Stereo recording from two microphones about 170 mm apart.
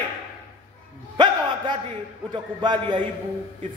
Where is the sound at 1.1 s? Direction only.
25° right (ahead or behind).